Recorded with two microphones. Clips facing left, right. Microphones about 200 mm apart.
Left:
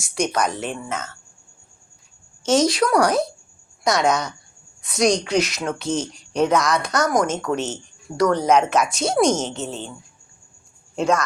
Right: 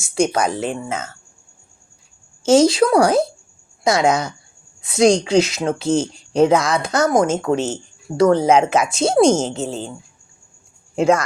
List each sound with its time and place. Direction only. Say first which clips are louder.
0.3 s speech: right 3 dB; 30° right (ahead or behind)
2.4 s speech: right 5 dB; 25° right (ahead or behind)